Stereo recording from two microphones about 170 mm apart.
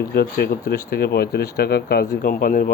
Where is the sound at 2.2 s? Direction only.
55° left (ahead or behind).